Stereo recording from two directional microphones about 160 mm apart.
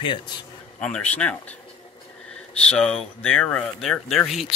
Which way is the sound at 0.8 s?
5° left (ahead or behind).